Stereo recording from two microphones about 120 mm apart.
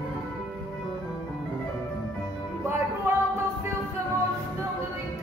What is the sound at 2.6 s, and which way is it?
Music, 20° right (ahead or behind).